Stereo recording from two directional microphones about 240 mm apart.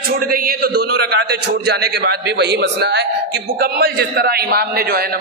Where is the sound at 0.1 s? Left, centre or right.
Right.